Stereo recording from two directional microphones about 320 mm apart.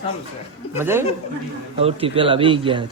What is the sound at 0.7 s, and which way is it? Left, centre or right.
A man's voice, centre.